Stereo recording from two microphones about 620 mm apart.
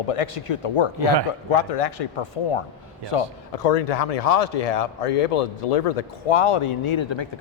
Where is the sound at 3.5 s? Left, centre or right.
Left.